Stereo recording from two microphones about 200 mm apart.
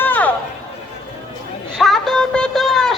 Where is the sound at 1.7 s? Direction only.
Centre (ahead or behind).